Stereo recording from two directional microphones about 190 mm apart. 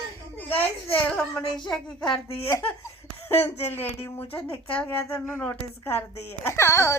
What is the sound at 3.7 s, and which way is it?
Speech, 10° left (ahead or behind).